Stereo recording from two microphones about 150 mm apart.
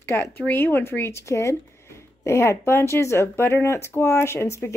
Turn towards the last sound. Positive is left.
turn(degrees=15)  # may be behind; listen again after turning